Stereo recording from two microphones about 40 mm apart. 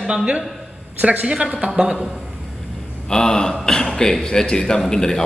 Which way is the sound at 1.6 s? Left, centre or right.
Centre.